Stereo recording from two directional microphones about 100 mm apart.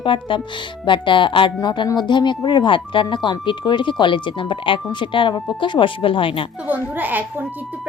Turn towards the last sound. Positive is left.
turn(degrees=-20)  # may be behind; listen again after turning